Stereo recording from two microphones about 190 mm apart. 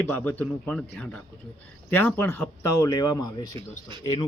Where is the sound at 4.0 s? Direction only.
25° left (ahead or behind).